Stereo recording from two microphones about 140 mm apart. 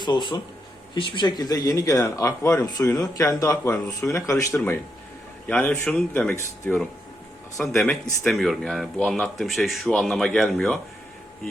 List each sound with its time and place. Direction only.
0.0 s a man's voice: 35° left (ahead or behind); by 6.3 s 10° left (ahead or behind)
7.6 s speech: 5° left (ahead or behind)